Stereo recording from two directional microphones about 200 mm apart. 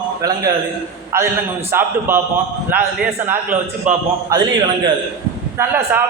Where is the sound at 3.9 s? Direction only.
35° right (ahead or behind).